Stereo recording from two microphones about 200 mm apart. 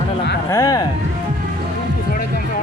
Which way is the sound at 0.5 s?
15° left (ahead or behind).